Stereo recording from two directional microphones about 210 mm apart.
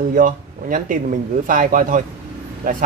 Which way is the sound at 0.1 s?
40° right (ahead or behind).